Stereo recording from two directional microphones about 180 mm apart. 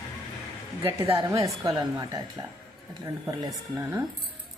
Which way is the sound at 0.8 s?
30° right (ahead or behind).